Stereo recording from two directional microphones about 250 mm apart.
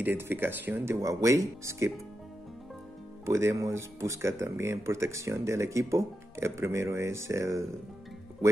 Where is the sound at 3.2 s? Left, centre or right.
Centre.